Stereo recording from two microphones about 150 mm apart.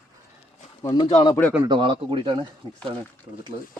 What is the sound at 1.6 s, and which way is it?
Speech, 30° right (ahead or behind).